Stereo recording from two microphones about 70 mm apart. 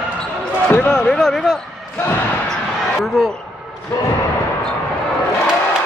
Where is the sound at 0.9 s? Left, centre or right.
Centre.